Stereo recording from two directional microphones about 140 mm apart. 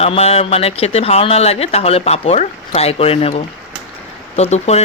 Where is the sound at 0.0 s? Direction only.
45° left (ahead or behind).